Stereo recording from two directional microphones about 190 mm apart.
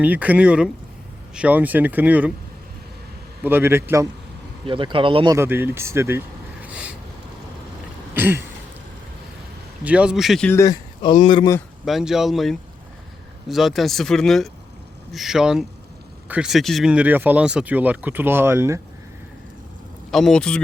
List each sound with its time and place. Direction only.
0.0 s speech: 10° right (ahead or behind)
3.4 s speech: 10° right (ahead or behind)
4.6 s speech: 25° right (ahead or behind); by 6.9 s 5° right (ahead or behind)
8.1 s a sound: 10° right (ahead or behind)
9.8 s speech: 5° right (ahead or behind)
10.5 s speech: 15° left (ahead or behind)
11.9 s speech: centre (ahead or behind)
20.1 s speech: centre (ahead or behind)